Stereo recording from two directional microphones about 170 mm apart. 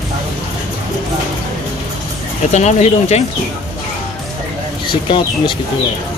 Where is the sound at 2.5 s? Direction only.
45° left (ahead or behind).